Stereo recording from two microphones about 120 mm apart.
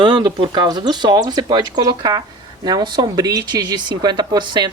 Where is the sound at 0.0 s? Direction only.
40° right (ahead or behind).